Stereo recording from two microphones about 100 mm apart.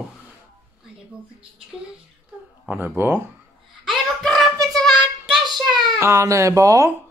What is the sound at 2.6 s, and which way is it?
Speech, 20° right (ahead or behind).